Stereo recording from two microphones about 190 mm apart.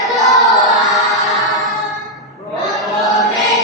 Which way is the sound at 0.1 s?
Centre (ahead or behind).